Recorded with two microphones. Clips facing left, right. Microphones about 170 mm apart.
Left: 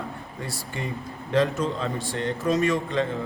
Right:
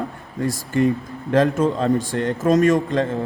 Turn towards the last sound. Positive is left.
turn(degrees=-45)  # may be behind; listen again after turning